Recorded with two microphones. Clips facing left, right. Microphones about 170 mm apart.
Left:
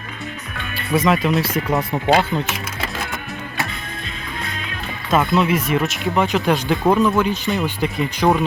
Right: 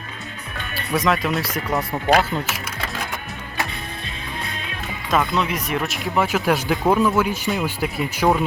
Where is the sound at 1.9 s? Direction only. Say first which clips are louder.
Even; 20° left (ahead or behind).